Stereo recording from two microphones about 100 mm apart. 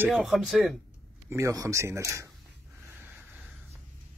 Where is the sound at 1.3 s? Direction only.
35° right (ahead or behind).